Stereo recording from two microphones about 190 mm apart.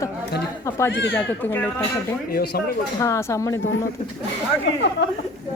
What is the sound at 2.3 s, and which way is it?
Speech, 55° left (ahead or behind).